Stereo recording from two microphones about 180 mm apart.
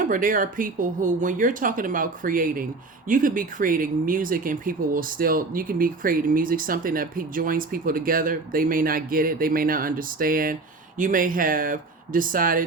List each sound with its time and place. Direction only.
0.1 s speech: 50° right (ahead or behind)